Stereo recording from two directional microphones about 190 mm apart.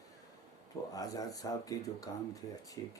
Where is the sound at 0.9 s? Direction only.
20° left (ahead or behind).